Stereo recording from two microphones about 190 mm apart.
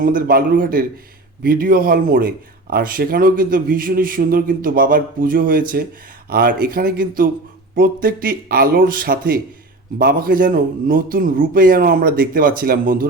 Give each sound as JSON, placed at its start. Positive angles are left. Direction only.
{"t": 0.0, "sound": "a man's voice", "side_deg": -50}